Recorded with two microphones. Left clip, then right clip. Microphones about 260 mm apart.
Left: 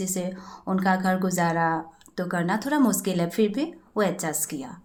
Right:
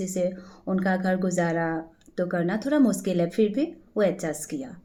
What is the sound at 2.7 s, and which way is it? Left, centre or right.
Speech, left.